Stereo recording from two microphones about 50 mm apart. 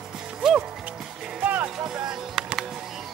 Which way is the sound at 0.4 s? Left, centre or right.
Centre.